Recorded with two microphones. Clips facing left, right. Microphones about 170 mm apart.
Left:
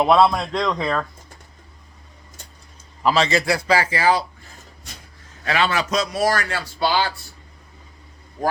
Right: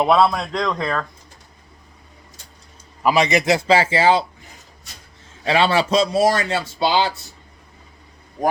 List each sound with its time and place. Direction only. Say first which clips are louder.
0.0 s a man's voice: even; centre (ahead or behind)
3.0 s a man's voice: right 2 dB; 15° right (ahead or behind)